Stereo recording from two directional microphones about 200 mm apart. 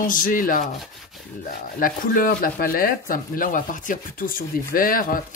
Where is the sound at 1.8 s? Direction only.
45° left (ahead or behind).